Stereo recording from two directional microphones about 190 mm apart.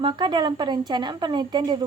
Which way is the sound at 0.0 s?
25° right (ahead or behind).